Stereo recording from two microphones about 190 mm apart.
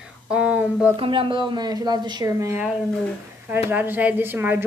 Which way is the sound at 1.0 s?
25° right (ahead or behind).